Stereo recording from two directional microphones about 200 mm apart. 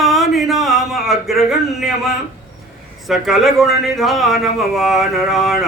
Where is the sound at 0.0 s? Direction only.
Centre (ahead or behind).